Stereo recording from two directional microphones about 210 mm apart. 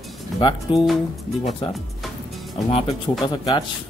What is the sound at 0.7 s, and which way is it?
Speech, 25° left (ahead or behind).